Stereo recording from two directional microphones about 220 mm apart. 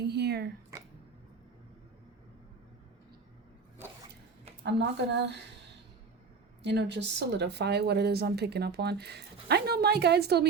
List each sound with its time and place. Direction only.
0.0 s a sound: 50° right (ahead or behind)
4.6 s speech: 50° right (ahead or behind)
6.6 s speech: 50° right (ahead or behind)